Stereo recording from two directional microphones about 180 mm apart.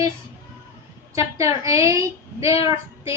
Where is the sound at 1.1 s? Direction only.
15° right (ahead or behind).